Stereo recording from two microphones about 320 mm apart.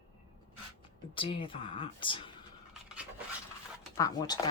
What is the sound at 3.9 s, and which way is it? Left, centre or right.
Speech, centre.